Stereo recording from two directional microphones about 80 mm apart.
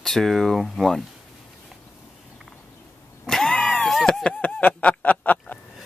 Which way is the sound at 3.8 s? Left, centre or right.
Centre.